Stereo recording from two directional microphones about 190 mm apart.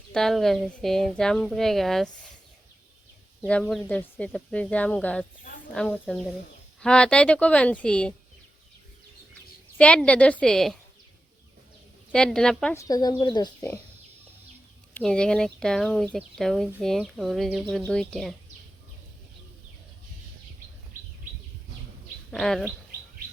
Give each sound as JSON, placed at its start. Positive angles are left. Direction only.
{"t": 0.1, "sound": "speech", "side_deg": 0}
{"t": 3.4, "sound": "speech", "side_deg": 5}
{"t": 9.7, "sound": "speech", "side_deg": 5}
{"t": 12.1, "sound": "speech", "side_deg": 5}
{"t": 12.7, "sound": "speech", "side_deg": 20}
{"t": 14.9, "sound": "speech", "side_deg": 5}
{"t": 22.3, "sound": "speech", "side_deg": 0}